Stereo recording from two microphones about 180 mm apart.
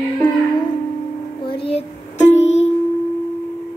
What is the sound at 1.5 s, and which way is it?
Music, 30° left (ahead or behind).